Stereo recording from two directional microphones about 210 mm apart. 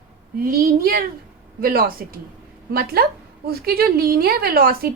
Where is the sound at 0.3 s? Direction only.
45° right (ahead or behind).